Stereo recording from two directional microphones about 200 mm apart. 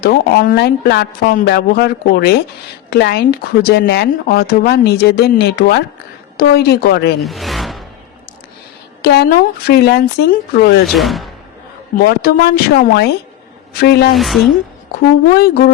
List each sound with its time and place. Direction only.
0.0 s speech: 50° left (ahead or behind)
7.2 s music: centre (ahead or behind)
9.0 s speech: 55° left (ahead or behind)
10.8 s speech: centre (ahead or behind)
11.9 s speech: 50° left (ahead or behind)
14.1 s speech: centre (ahead or behind)
15.4 s speech: 50° left (ahead or behind)